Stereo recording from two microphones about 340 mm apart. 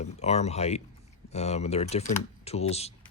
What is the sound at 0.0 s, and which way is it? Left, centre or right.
Speech, centre.